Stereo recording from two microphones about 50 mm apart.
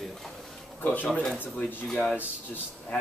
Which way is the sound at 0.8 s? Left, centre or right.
Left.